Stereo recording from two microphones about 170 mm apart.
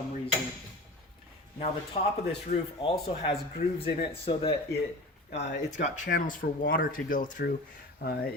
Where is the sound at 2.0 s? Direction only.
40° left (ahead or behind).